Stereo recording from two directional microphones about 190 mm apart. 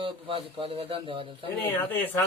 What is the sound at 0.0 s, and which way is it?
A man's voice, 25° right (ahead or behind).